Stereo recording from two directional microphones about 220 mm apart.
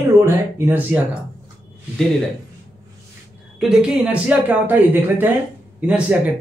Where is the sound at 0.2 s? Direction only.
10° right (ahead or behind).